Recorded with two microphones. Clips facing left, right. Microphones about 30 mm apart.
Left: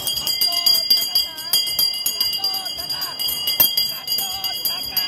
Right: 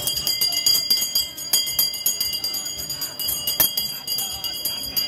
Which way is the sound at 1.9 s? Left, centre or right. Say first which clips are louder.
Left 4 dB; left.